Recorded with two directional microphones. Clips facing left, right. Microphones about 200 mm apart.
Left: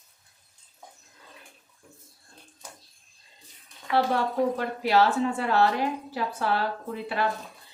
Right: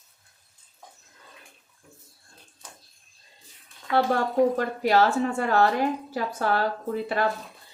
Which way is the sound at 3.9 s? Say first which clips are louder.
Right 3 dB; 45° right (ahead or behind).